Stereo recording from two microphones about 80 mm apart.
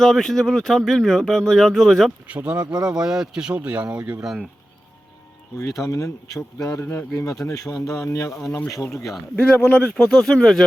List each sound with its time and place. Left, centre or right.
0.0 s speech: centre
2.2 s speech: centre
5.5 s speech: left
6.8 s speech: left
7.4 s speech: left
9.6 s speech: left
9.9 s speech: centre